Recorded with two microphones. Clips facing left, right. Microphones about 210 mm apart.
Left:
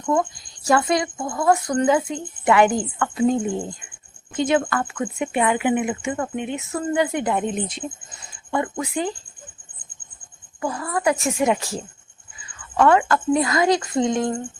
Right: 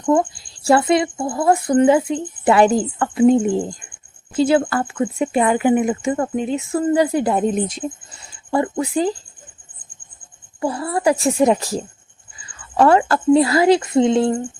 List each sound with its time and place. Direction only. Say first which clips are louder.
0.0 s speech: right 5 dB; 30° right (ahead or behind)
8.4 s speech: right 5 dB; 30° right (ahead or behind)
10.6 s speech: right 4 dB; 30° right (ahead or behind)